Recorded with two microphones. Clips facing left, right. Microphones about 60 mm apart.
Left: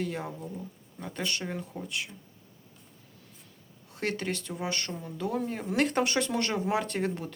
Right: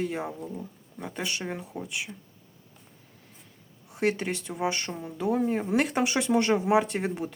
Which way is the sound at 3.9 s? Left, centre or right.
Centre.